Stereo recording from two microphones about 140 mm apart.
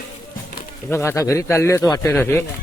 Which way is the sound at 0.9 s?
20° left (ahead or behind).